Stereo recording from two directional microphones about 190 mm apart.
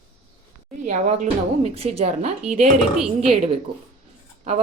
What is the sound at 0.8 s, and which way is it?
A woman's voice, 40° right (ahead or behind).